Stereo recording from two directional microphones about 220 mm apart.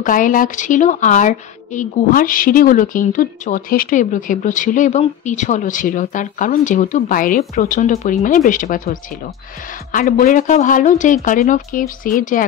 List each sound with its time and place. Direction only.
0.0 s a woman's voice: 35° left (ahead or behind)
9.9 s a woman's voice: 40° left (ahead or behind)